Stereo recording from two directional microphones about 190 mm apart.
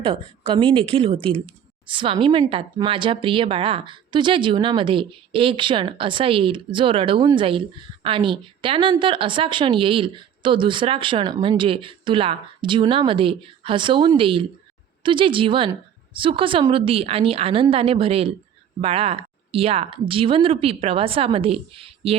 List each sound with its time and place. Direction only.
0.0 s speech: 25° right (ahead or behind)